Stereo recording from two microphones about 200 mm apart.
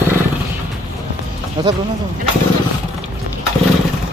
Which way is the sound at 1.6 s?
20° right (ahead or behind).